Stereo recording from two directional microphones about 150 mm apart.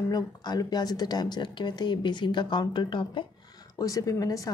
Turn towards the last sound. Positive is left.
turn(degrees=20)  # may be behind; listen again after turning